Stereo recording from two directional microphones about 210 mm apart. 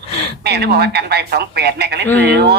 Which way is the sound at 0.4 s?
50° right (ahead or behind).